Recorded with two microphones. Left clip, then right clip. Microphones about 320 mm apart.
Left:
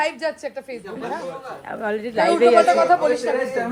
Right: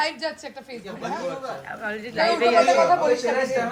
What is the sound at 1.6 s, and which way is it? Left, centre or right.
Snicker, centre.